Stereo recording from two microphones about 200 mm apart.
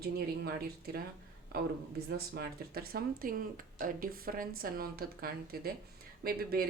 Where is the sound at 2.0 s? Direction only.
50° right (ahead or behind).